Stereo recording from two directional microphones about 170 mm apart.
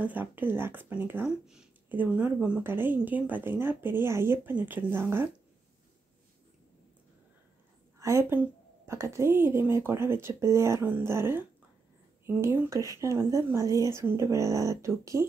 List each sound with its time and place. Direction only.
0.0 s speech: 10° right (ahead or behind)
8.0 s speech: 15° right (ahead or behind)